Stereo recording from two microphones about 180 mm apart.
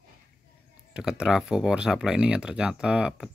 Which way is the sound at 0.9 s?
5° right (ahead or behind).